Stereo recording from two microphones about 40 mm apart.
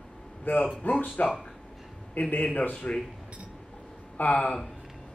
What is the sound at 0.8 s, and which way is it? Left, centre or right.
Speech, left.